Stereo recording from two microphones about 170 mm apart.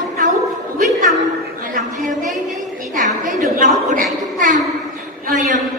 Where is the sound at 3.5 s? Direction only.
50° right (ahead or behind).